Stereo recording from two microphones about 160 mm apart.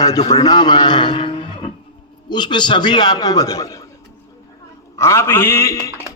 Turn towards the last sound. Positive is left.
turn(degrees=20)  # may be behind; listen again after turning